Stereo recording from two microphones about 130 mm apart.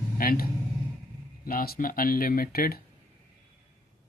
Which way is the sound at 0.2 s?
90° left.